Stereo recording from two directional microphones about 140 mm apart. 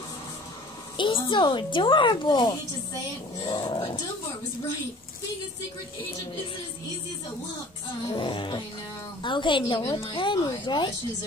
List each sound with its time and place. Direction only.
0.9 s a woman's voice: 35° left (ahead or behind)
8.1 s a woman's voice: 35° left (ahead or behind)